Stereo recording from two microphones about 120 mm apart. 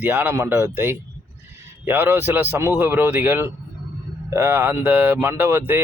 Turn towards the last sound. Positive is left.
turn(degrees=-20)  # may be behind; listen again after turning